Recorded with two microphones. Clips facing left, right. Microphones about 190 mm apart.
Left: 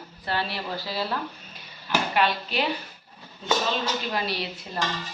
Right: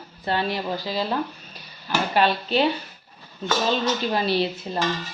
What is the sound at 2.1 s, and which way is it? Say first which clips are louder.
Speech: right 6 dB; 30° right (ahead or behind).